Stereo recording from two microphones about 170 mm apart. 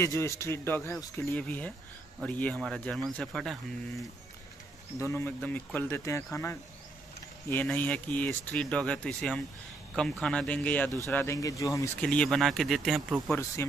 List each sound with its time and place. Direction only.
0.0 s speech: 15° left (ahead or behind)
4.9 s speech: 15° left (ahead or behind)
12.0 s speech: 5° left (ahead or behind)
13.6 s speech: 15° left (ahead or behind)